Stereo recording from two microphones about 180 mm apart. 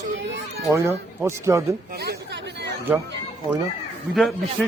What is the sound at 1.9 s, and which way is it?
Chatter, 65° right (ahead or behind).